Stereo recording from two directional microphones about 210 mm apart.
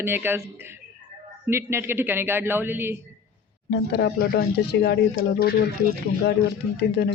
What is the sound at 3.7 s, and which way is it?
Speech, 50° left (ahead or behind).